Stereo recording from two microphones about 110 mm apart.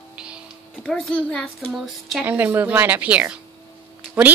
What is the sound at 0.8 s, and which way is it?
Speech, 5° left (ahead or behind).